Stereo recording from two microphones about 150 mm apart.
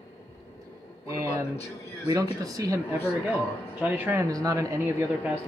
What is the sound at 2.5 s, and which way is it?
Speech, 25° right (ahead or behind).